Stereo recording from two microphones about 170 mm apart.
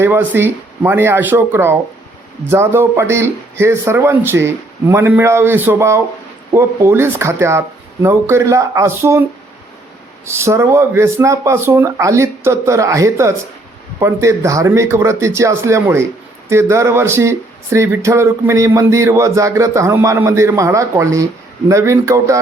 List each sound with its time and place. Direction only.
0.0 s speech: 15° right (ahead or behind)
10.2 s speech: 15° right (ahead or behind)